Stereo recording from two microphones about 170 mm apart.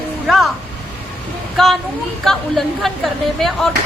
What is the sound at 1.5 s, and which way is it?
A woman's voice, centre (ahead or behind).